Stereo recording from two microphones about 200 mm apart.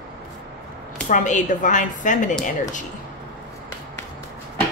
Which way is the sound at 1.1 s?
40° left (ahead or behind).